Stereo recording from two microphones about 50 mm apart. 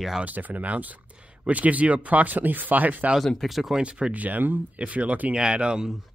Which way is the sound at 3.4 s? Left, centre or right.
Centre.